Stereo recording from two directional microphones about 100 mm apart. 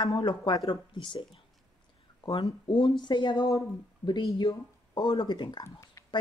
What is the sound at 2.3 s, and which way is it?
Speech, 55° left (ahead or behind).